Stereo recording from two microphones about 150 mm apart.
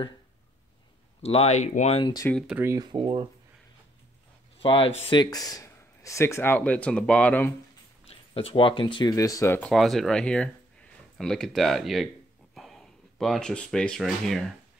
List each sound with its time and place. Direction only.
1.2 s speech: 45° left (ahead or behind)
2.4 s speech: 10° right (ahead or behind)
2.7 s speech: 30° right (ahead or behind)
4.6 s speech: 35° left (ahead or behind); by 7.5 s 10° left (ahead or behind)
8.1 s speech: 40° left (ahead or behind); by 9.6 s 20° left (ahead or behind)
9.6 s speech: centre (ahead or behind)